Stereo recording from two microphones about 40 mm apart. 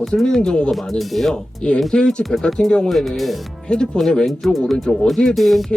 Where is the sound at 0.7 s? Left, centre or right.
Centre.